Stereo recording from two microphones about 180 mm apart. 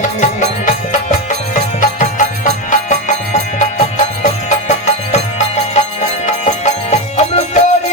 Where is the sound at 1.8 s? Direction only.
45° left (ahead or behind).